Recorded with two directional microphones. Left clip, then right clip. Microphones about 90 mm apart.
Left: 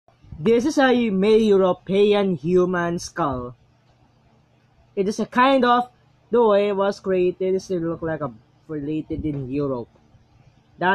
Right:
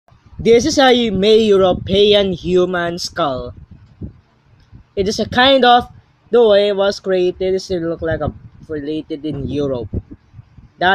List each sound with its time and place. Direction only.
0.5 s speech: 10° left (ahead or behind)
4.9 s speech: 5° left (ahead or behind)
5.6 s speech: 20° left (ahead or behind)
6.3 s speech: 10° left (ahead or behind)
7.8 s speech: centre (ahead or behind)